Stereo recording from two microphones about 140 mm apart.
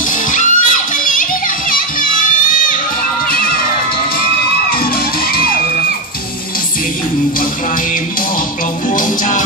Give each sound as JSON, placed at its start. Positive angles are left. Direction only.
{"t": 0.3, "sound": "music", "side_deg": 65}
{"t": 3.3, "sound": "music", "side_deg": 90}
{"t": 8.9, "sound": "music", "side_deg": 70}